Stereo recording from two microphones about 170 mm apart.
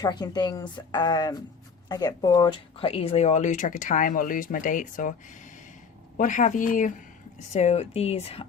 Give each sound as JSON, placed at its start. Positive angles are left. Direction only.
{"t": 0.0, "sound": "a woman's voice", "side_deg": 25}
{"t": 6.1, "sound": "speech", "side_deg": 50}